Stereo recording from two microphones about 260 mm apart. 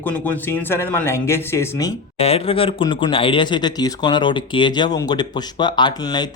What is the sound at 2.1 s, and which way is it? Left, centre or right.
Speech, left.